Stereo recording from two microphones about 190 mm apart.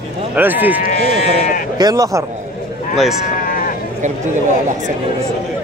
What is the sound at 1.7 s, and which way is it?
Speech, 20° right (ahead or behind).